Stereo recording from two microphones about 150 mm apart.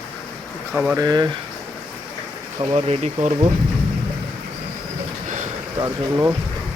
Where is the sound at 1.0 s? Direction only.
30° right (ahead or behind).